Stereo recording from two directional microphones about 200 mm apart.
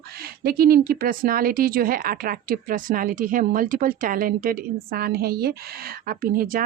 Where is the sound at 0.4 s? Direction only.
50° right (ahead or behind).